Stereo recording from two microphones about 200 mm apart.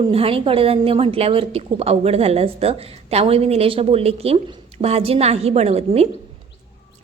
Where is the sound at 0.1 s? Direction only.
30° right (ahead or behind).